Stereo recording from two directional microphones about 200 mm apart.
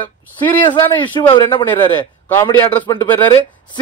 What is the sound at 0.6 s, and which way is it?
Speech, 25° left (ahead or behind).